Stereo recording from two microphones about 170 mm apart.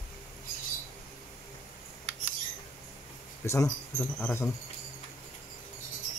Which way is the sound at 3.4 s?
15° left (ahead or behind).